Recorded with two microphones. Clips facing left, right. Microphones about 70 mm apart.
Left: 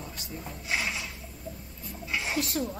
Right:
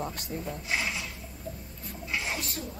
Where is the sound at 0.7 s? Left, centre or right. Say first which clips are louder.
Left 2 dB; centre.